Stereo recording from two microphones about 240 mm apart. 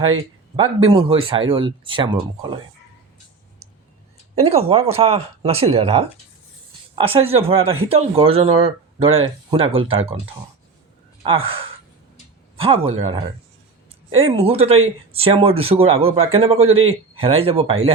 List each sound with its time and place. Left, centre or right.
0.9 s speech: right
4.4 s speech: right
11.2 s speech: right